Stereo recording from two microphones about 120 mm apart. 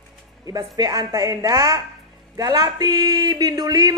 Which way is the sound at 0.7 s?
30° right (ahead or behind).